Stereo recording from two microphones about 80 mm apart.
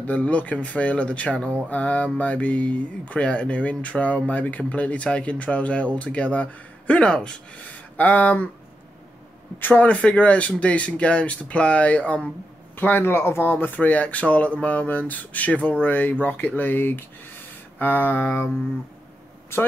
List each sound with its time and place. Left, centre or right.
0.0 s speech: centre
9.6 s speech: centre